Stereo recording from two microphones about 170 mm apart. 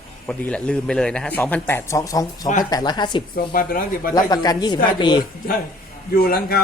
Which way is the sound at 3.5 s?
55° left (ahead or behind).